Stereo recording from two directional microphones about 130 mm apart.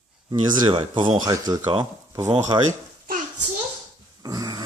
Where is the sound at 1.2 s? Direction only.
30° right (ahead or behind).